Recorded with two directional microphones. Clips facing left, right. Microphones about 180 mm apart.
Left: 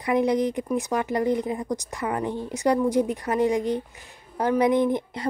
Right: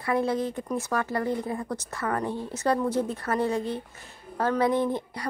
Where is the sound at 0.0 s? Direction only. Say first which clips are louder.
Left 4 dB; 15° left (ahead or behind).